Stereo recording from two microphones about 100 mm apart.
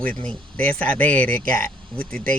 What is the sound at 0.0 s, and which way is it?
Speech, 10° left (ahead or behind).